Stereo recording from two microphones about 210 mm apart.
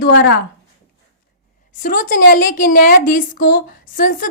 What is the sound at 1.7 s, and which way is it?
A woman's voice, 40° left (ahead or behind).